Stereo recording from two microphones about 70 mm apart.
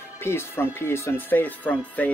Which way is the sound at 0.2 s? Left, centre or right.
Left.